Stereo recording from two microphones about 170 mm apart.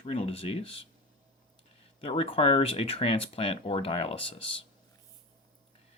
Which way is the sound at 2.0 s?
35° left (ahead or behind).